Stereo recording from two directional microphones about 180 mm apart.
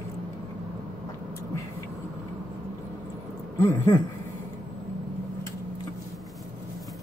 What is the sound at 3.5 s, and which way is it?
Speech, 20° left (ahead or behind).